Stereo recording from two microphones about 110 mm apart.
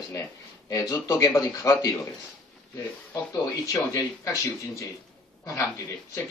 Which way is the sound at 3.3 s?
35° left (ahead or behind).